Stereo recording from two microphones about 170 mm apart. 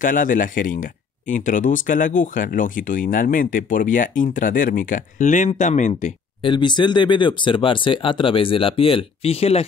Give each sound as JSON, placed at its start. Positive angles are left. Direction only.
{"t": 0.0, "sound": "speech", "side_deg": 50}
{"t": 6.4, "sound": "speech", "side_deg": 25}